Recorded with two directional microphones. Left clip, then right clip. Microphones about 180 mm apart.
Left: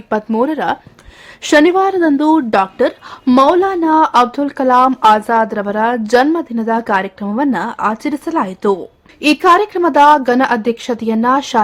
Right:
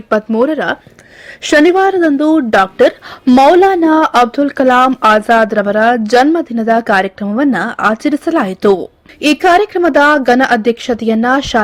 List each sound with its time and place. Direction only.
0.1 s a woman's voice: 10° right (ahead or behind)
2.5 s a woman's voice: 15° right (ahead or behind)